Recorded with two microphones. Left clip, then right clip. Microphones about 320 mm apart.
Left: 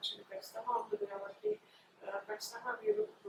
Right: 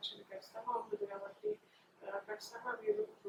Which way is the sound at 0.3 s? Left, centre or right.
Centre.